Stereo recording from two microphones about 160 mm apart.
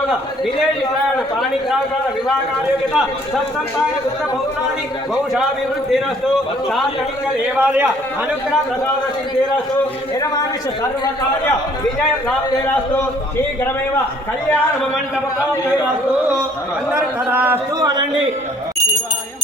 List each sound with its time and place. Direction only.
7.5 s a man's voice: 10° right (ahead or behind)
16.9 s a man's voice: 10° right (ahead or behind)
17.8 s a man's voice: 25° right (ahead or behind)